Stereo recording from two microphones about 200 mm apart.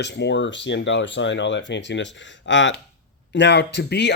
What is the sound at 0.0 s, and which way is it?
Speech, 60° left (ahead or behind).